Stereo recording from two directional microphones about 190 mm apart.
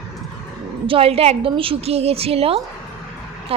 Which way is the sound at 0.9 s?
30° right (ahead or behind).